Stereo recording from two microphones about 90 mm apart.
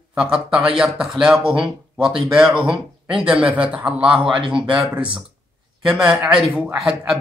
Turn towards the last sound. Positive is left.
turn(degrees=-5)  # may be behind; listen again after turning